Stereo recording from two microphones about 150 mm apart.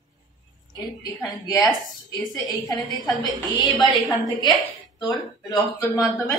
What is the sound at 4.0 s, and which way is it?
A woman's voice, 25° left (ahead or behind).